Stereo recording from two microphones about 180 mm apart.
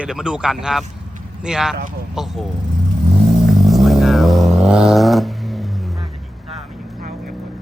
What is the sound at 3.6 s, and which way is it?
Vehicle, centre (ahead or behind).